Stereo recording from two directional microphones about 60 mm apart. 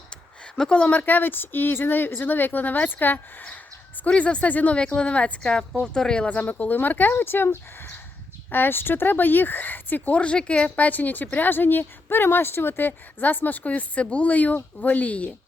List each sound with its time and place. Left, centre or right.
0.7 s a woman's voice: left
6.2 s a woman's voice: left